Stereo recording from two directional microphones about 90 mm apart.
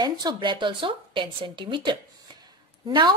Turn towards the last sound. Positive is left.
turn(degrees=-50)  # may be behind; listen again after turning